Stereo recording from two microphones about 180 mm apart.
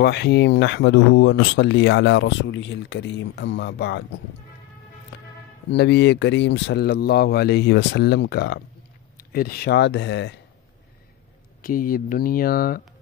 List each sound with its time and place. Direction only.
0.0 s speech: 65° left (ahead or behind)
5.7 s speech: 70° left (ahead or behind); by 10.3 s 85° left
11.6 s speech: 50° left (ahead or behind)